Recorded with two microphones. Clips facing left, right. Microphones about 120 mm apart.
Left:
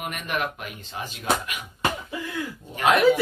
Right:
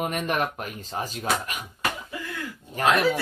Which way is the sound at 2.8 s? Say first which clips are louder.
Left 1 dB; 40° right (ahead or behind).